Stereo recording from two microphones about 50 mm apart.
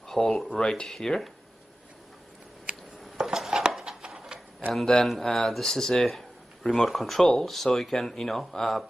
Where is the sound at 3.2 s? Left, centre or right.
Centre.